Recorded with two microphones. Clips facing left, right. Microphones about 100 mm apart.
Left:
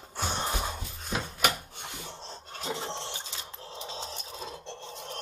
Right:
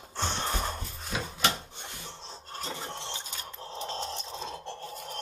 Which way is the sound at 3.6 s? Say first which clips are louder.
Right 6 dB; 30° right (ahead or behind).